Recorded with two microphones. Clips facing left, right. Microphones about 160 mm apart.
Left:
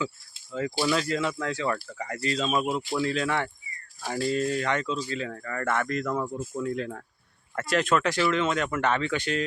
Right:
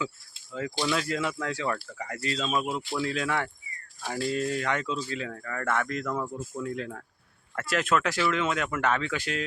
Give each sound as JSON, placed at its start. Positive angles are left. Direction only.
{"t": 0.0, "sound": "speech", "side_deg": 0}